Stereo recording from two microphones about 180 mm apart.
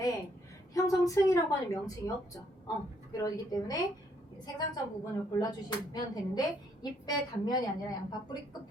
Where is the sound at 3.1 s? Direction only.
20° left (ahead or behind).